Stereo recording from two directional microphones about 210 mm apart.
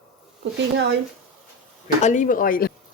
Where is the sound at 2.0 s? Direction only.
35° left (ahead or behind).